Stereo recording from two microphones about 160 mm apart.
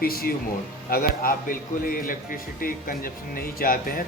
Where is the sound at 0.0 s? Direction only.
70° left (ahead or behind).